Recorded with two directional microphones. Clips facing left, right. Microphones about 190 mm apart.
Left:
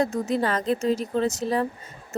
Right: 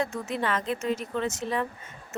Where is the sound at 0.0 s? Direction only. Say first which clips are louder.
Left 6 dB; 35° left (ahead or behind).